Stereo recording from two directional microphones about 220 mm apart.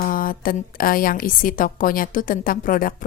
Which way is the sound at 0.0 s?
40° left (ahead or behind).